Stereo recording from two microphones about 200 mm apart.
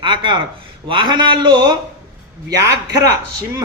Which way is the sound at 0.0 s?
25° right (ahead or behind).